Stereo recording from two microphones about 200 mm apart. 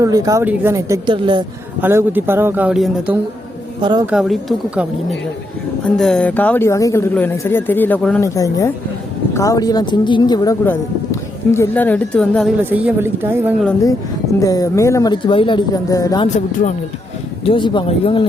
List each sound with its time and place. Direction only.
0.0 s speech: 15° right (ahead or behind)
1.8 s speech: 10° right (ahead or behind)
3.8 s speech: 25° right (ahead or behind)
4.0 s speech: centre (ahead or behind)
12.7 s speech: 10° right (ahead or behind)
14.3 s speech: 15° left (ahead or behind)
17.4 s speech: 25° left (ahead or behind)